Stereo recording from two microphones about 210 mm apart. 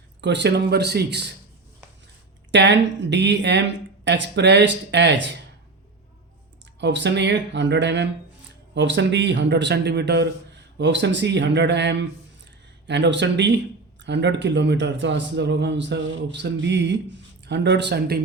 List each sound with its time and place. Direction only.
0.2 s speech: 55° right (ahead or behind)
2.5 s a man's voice: 60° right (ahead or behind)
6.7 s a man's voice: 55° right (ahead or behind)